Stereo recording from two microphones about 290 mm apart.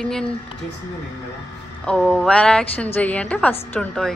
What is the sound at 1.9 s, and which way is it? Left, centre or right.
A woman's voice, centre.